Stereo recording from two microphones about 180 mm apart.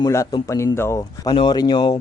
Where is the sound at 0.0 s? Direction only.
20° left (ahead or behind).